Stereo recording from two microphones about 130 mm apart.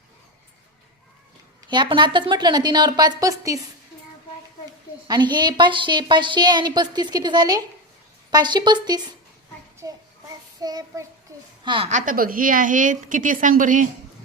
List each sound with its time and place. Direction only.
1.7 s a woman's voice: 35° right (ahead or behind)
5.0 s a woman's voice: 35° right (ahead or behind)
11.9 s a woman's voice: 80° right